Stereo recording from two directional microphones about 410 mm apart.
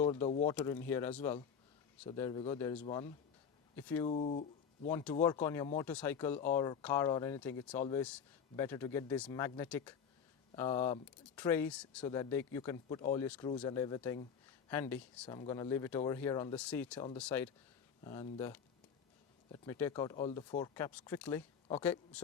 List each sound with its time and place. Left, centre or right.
0.0 s speech: centre
4.0 s speech: centre
4.9 s speech: centre